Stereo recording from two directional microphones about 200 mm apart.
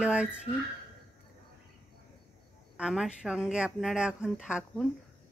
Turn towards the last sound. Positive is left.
turn(degrees=-5)  # may be behind; listen again after turning